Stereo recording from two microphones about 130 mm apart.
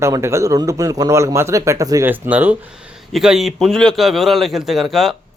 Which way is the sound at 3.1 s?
5° right (ahead or behind).